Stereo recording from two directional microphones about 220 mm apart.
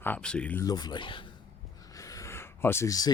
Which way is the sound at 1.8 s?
15° left (ahead or behind).